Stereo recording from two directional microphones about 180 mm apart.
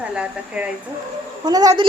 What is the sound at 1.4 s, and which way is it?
Speech, 20° right (ahead or behind).